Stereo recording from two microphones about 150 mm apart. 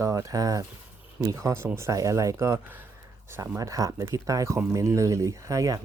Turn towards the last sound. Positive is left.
turn(degrees=-20)  # may be behind; listen again after turning